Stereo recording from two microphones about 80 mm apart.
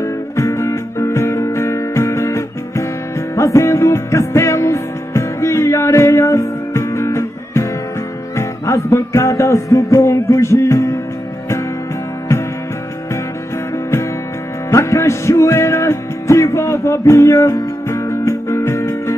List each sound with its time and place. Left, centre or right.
0.0 s music: left
14.7 s music: left